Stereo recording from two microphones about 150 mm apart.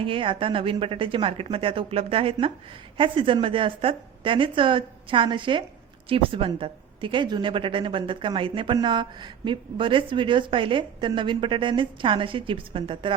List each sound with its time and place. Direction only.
0.0 s a woman's voice: 35° right (ahead or behind)